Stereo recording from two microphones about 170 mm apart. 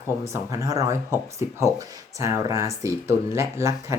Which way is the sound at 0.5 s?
20° right (ahead or behind).